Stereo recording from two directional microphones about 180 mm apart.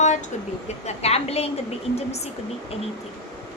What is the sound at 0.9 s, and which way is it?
Speech, 35° left (ahead or behind).